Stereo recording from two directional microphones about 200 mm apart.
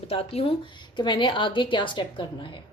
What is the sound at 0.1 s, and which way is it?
A woman's voice, 30° left (ahead or behind).